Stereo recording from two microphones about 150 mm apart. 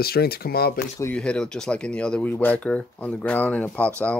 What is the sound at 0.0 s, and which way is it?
Speech, 90° left.